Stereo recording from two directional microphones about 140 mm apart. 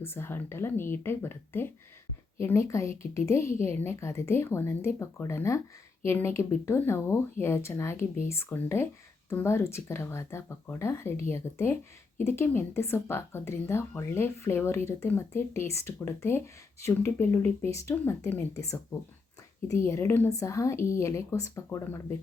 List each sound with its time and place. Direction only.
0.0 s a woman's voice: 15° left (ahead or behind)
19.6 s a woman's voice: 20° left (ahead or behind)